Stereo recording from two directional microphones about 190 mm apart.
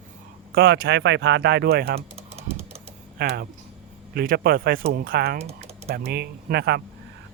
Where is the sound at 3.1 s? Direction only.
55° right (ahead or behind).